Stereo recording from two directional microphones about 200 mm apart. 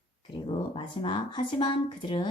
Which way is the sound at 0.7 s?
25° left (ahead or behind).